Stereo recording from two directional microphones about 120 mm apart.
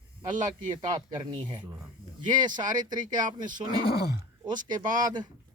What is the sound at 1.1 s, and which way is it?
Speech, 40° right (ahead or behind).